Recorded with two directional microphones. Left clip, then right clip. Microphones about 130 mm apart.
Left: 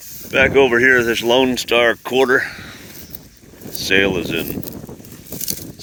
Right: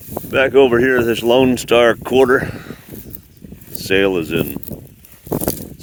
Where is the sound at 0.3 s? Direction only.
75° right (ahead or behind).